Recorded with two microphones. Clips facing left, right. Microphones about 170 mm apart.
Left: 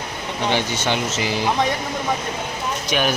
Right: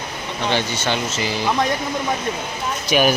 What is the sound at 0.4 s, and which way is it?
Speech, 15° left (ahead or behind).